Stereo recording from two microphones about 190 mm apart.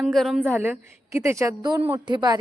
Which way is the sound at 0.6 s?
15° right (ahead or behind).